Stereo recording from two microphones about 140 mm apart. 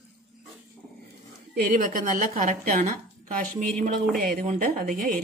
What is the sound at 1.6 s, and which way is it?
A woman's voice, 80° right.